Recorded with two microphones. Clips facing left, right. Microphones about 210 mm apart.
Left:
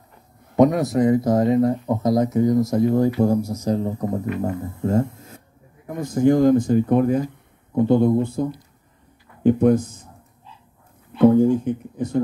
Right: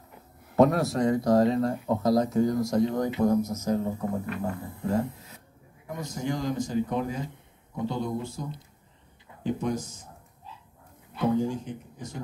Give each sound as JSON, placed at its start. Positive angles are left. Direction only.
{"t": 0.6, "sound": "a man's voice", "side_deg": 15}
{"t": 2.4, "sound": "speech", "side_deg": 0}
{"t": 3.2, "sound": "speech", "side_deg": 30}
{"t": 11.1, "sound": "speech", "side_deg": 55}